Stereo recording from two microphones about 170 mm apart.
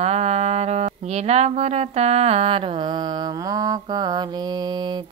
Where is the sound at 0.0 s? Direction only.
40° right (ahead or behind).